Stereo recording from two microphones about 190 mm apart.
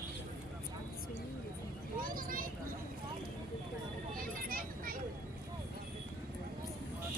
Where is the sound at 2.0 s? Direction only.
45° right (ahead or behind).